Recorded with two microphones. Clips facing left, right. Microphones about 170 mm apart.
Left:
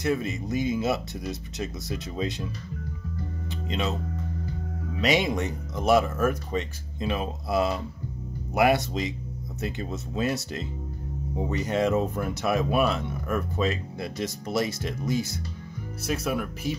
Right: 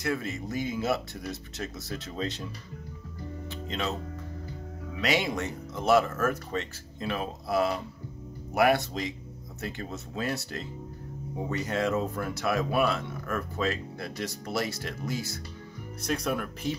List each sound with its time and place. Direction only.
0.0 s speech: 20° left (ahead or behind)
3.6 s speech: 15° left (ahead or behind)
5.0 s speech: 20° left (ahead or behind)
16.0 s speech: 5° left (ahead or behind)